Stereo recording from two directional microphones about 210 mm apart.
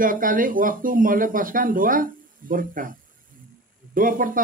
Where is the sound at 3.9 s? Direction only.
40° right (ahead or behind).